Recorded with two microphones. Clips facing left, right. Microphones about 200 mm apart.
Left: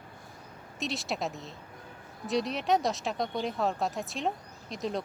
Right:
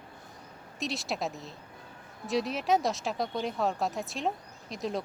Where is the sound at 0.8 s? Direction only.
Centre (ahead or behind).